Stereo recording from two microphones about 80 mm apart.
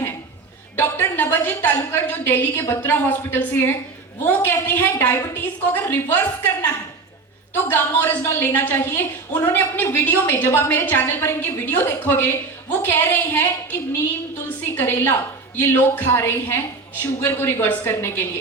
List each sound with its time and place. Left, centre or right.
0.8 s a sound: left
1.9 s a woman's voice: left
14.8 s a woman's voice: left